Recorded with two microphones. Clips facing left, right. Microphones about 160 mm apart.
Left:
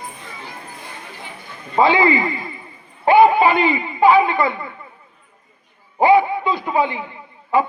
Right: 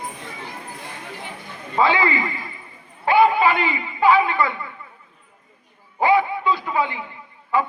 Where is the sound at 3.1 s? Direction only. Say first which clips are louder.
Left 4 dB; 20° left (ahead or behind).